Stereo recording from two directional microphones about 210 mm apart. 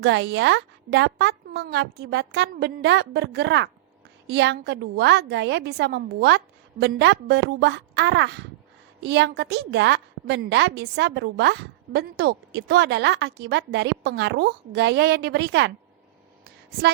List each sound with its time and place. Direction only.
0.0 s a woman's voice: 55° right (ahead or behind)